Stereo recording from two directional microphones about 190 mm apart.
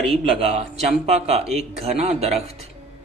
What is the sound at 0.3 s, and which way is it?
Speech, 35° right (ahead or behind).